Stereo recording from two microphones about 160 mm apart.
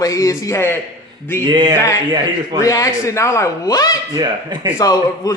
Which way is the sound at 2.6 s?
20° left (ahead or behind).